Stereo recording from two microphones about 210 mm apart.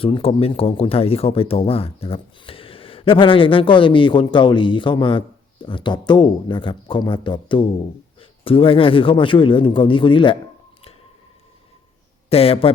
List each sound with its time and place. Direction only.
0.0 s speech: 25° left (ahead or behind)
12.3 s speech: 25° left (ahead or behind)